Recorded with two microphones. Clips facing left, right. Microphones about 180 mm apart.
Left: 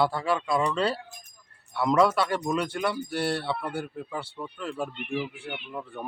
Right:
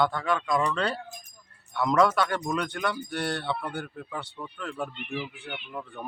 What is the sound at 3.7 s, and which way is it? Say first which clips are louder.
Speech: left 2 dB; 5° left (ahead or behind).